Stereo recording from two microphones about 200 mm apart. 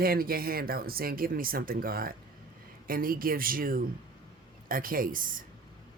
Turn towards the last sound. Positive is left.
turn(degrees=-45)  # may be behind; listen again after turning